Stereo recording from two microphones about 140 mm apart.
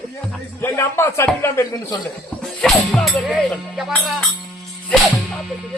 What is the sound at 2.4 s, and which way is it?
Speech, 5° left (ahead or behind).